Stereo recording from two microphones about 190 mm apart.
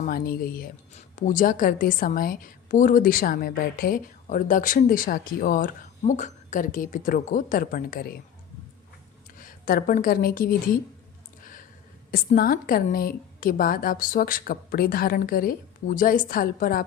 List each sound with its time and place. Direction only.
0.0 s a woman's voice: 50° left (ahead or behind)
9.4 s a woman's voice: 50° left (ahead or behind)
12.1 s a woman's voice: 50° left (ahead or behind)